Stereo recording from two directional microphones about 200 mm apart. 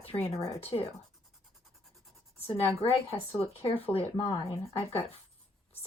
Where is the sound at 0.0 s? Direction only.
30° left (ahead or behind).